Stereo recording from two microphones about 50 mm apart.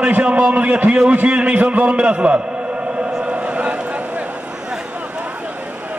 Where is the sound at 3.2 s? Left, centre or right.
Right.